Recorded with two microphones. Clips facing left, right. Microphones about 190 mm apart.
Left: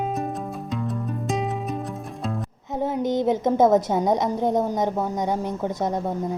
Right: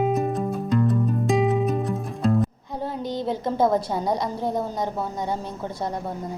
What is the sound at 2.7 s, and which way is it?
A woman's voice, 20° left (ahead or behind).